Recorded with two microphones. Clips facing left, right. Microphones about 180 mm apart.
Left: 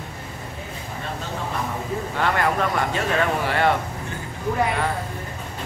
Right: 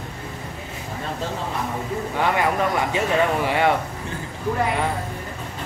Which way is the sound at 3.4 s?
10° right (ahead or behind).